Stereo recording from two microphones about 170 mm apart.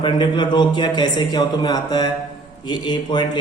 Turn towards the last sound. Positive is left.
turn(degrees=25)  # may be behind; listen again after turning